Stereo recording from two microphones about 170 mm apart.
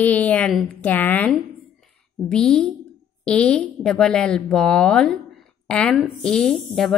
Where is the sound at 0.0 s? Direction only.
10° left (ahead or behind).